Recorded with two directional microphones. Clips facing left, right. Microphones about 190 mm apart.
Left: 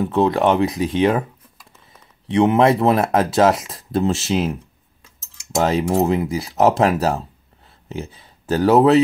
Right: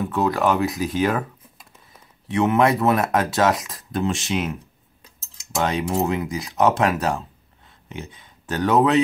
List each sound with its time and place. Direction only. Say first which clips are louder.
0.0 s speech: left 4 dB; 30° left (ahead or behind)
2.2 s speech: left 4 dB; 30° left (ahead or behind)